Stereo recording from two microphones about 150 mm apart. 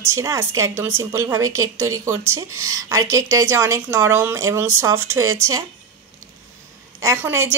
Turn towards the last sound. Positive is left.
turn(degrees=-15)  # may be behind; listen again after turning